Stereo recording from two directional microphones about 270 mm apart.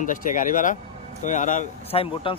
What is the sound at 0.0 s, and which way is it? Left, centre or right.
Speech, left.